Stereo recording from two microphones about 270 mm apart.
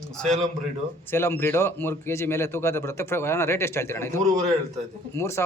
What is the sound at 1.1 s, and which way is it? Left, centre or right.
A man's voice, centre.